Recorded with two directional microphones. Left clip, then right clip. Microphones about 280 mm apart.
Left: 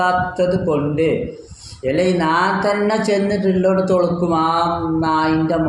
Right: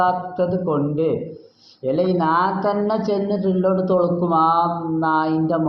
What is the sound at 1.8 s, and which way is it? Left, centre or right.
Speech, centre.